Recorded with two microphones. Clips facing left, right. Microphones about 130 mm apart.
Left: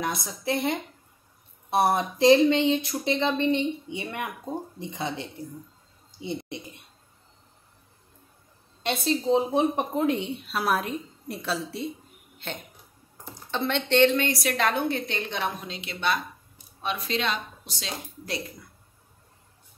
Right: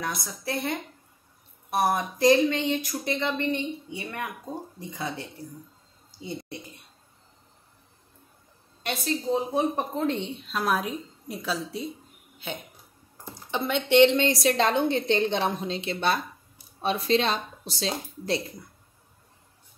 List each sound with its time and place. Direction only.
0.0 s speech: 20° left (ahead or behind)
6.1 s a sound: 20° left (ahead or behind)
8.8 s speech: 25° left (ahead or behind)
9.9 s a woman's voice: 10° left (ahead or behind); by 14.1 s 15° right (ahead or behind)
14.1 s a woman's voice: 25° right (ahead or behind)